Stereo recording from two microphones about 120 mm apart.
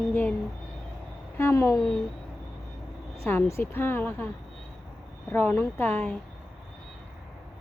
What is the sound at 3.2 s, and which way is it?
Speech, 20° left (ahead or behind).